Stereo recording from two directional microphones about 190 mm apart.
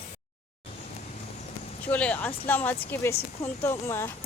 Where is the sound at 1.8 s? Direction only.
10° left (ahead or behind).